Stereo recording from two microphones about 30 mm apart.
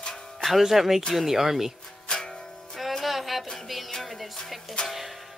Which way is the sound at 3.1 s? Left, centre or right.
Centre.